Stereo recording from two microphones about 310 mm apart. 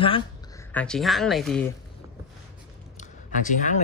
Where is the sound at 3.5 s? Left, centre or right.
Left.